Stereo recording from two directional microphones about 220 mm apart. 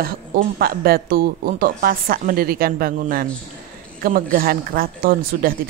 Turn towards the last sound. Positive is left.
turn(degrees=-45)  # may be behind; listen again after turning